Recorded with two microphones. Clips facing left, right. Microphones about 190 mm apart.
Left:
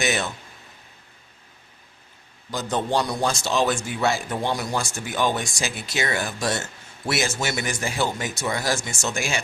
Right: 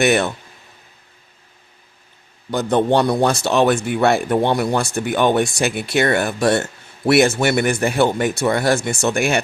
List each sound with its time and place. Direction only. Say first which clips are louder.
0.0 s a man's voice: right 9 dB; 60° right (ahead or behind)
2.5 s a man's voice: right 8 dB; 60° right (ahead or behind)